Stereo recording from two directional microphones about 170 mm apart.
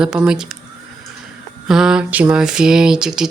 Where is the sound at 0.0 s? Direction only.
5° right (ahead or behind).